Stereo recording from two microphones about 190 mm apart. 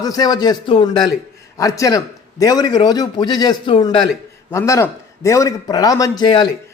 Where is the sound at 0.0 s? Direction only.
20° left (ahead or behind).